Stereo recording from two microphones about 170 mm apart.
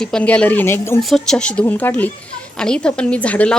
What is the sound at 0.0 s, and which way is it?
Speech, 5° left (ahead or behind).